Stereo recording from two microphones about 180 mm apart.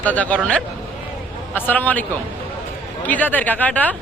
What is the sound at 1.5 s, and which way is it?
Speech, 10° left (ahead or behind).